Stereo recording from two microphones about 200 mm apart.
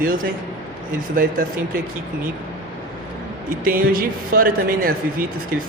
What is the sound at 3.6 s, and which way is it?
Speech, 45° right (ahead or behind).